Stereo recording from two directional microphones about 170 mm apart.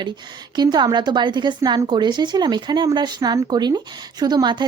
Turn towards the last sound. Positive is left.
turn(degrees=-25)  # may be behind; listen again after turning